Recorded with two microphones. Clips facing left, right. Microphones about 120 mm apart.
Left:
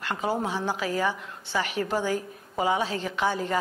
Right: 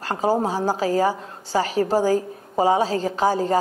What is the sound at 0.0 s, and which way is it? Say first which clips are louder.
A woman's voice: right 7 dB; 35° right (ahead or behind).